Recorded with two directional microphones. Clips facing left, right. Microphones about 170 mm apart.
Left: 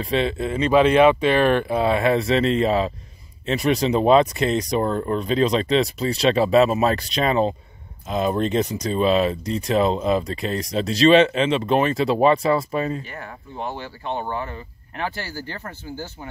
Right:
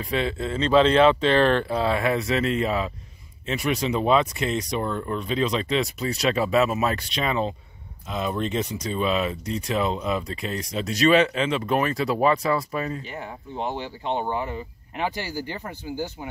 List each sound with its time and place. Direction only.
0.0 s speech: 25° left (ahead or behind)
13.0 s speech: 20° right (ahead or behind)